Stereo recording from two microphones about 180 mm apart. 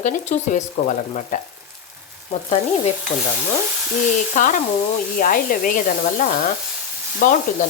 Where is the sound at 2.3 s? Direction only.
40° left (ahead or behind).